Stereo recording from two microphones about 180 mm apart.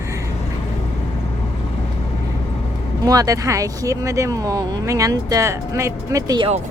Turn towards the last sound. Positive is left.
turn(degrees=-25)  # may be behind; listen again after turning